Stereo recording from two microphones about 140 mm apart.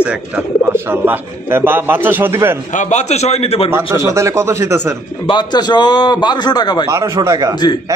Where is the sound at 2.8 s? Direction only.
55° left (ahead or behind).